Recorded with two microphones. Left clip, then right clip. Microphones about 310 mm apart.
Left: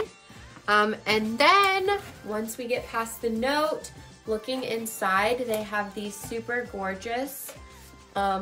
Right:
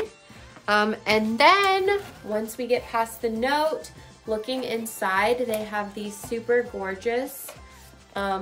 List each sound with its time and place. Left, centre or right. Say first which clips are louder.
0.7 s a woman's voice: right 1 dB; centre